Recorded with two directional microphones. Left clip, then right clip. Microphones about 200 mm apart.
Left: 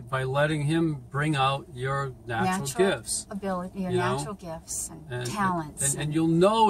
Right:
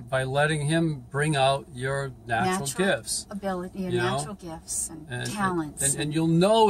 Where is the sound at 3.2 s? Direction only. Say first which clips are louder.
Even; 20° left (ahead or behind).